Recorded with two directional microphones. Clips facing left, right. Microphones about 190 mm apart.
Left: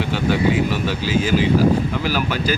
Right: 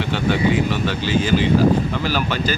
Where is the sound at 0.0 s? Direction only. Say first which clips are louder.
Even; 5° left (ahead or behind).